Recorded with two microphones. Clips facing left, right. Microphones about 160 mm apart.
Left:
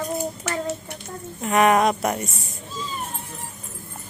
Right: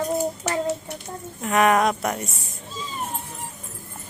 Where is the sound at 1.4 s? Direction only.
Centre (ahead or behind).